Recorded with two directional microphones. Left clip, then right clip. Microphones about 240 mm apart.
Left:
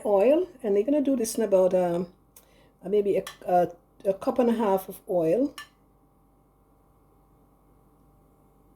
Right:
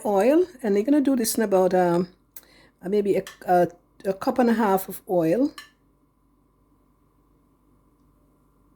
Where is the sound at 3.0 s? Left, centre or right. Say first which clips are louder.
Right 3 dB; right.